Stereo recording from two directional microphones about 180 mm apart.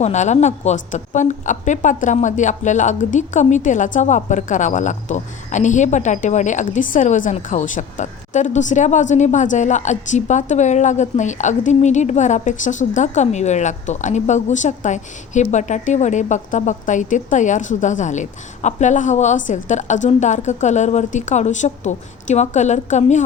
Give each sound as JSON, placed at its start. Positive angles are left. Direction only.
{"t": 0.0, "sound": "a woman's voice", "side_deg": 40}